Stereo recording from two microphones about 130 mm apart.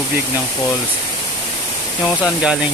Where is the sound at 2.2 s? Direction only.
5° right (ahead or behind).